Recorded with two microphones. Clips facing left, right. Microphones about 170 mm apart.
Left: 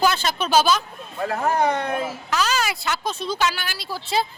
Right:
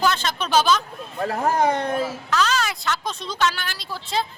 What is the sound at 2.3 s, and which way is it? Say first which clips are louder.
Speech: even; 5° left (ahead or behind).